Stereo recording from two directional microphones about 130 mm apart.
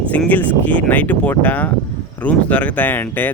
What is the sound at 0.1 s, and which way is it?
Speech, 10° left (ahead or behind).